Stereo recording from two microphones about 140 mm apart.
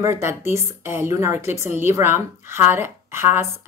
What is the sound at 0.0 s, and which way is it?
A woman's voice, 20° right (ahead or behind).